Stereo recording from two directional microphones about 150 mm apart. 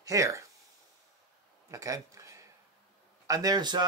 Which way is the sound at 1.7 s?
20° right (ahead or behind).